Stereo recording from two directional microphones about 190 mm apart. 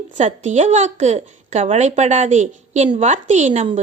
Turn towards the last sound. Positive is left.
turn(degrees=-35)  # may be behind; listen again after turning